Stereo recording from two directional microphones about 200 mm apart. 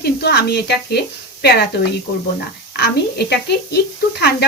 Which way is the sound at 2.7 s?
55° left (ahead or behind).